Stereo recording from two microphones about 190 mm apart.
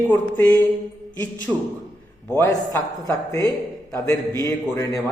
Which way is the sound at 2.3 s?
15° left (ahead or behind).